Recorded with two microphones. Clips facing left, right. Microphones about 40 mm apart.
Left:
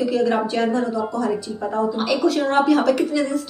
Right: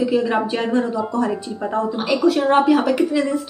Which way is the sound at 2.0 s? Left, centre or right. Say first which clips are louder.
Right 4 dB; centre.